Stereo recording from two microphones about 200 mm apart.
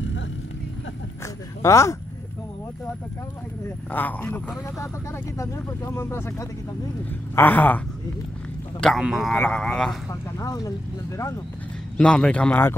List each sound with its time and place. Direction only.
1.2 s a sound: 15° left (ahead or behind)
3.9 s speech: 10° left (ahead or behind)
8.8 s a man's voice: centre (ahead or behind)
10.3 s speech: 15° left (ahead or behind)
12.0 s a man's voice: 5° left (ahead or behind)